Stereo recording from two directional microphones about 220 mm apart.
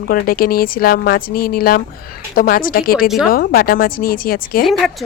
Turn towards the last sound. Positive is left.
turn(degrees=0)  # may be behind; listen again after turning